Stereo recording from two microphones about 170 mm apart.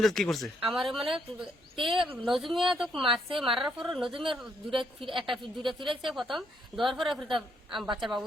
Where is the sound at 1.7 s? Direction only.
30° right (ahead or behind).